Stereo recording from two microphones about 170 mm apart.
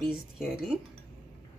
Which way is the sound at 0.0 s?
Centre (ahead or behind).